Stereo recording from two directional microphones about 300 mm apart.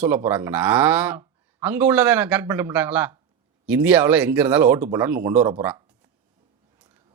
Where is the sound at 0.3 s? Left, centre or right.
Centre.